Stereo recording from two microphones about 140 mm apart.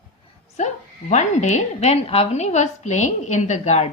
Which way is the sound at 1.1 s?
55° left (ahead or behind).